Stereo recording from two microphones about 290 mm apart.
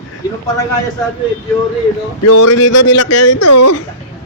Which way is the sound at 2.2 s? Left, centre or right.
Left.